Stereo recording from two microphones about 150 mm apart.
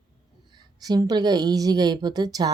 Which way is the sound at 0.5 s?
25° right (ahead or behind).